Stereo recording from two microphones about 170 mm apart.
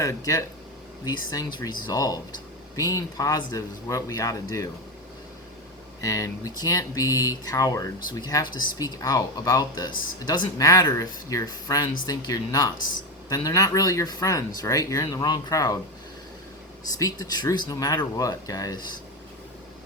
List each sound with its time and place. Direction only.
0.0 s speech: 20° left (ahead or behind)
6.0 s speech: 20° left (ahead or behind)
17.0 s speech: 20° left (ahead or behind)